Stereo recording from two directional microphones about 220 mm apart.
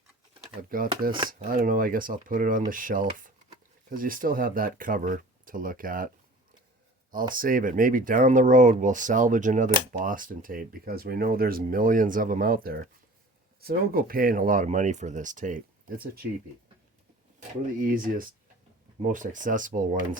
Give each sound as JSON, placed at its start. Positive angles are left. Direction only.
{"t": 0.7, "sound": "speech", "side_deg": -40}
{"t": 7.3, "sound": "speech", "side_deg": -40}
{"t": 17.7, "sound": "speech", "side_deg": -40}